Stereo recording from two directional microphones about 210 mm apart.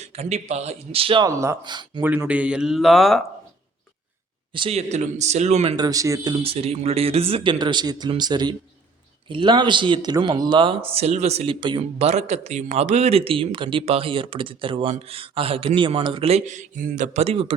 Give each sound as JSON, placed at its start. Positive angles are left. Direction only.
{"t": 0.0, "sound": "speech", "side_deg": -30}
{"t": 2.0, "sound": "speech", "side_deg": -5}
{"t": 4.5, "sound": "speech", "side_deg": -25}
{"t": 6.4, "sound": "speech", "side_deg": -25}